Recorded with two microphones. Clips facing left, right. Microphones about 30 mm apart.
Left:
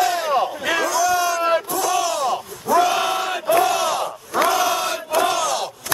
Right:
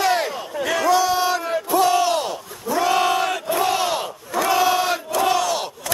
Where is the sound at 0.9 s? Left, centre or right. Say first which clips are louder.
Right 3 dB; right.